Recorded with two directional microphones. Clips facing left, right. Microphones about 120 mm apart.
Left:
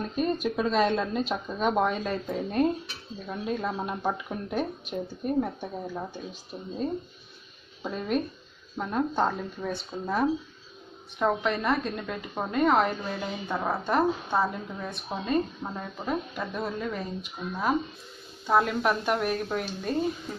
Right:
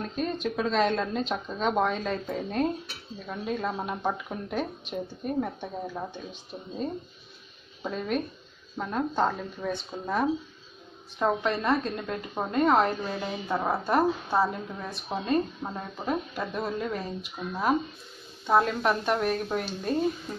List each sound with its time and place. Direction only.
0.1 s a woman's voice: 5° left (ahead or behind)
7.8 s a woman's voice: centre (ahead or behind)
9.9 s speech: 10° right (ahead or behind)
11.1 s a woman's voice: centre (ahead or behind)